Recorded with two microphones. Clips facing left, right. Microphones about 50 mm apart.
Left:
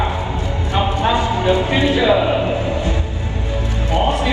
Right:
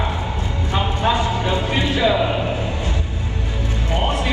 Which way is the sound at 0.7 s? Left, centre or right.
Left.